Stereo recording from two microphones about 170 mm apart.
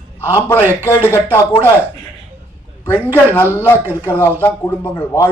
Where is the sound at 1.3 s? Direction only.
15° left (ahead or behind).